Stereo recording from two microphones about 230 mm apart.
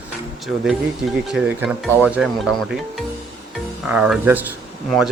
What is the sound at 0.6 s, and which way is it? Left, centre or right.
Speech, centre.